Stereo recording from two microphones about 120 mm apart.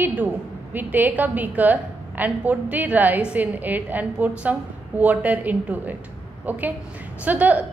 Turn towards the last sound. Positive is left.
turn(degrees=-15)  # may be behind; listen again after turning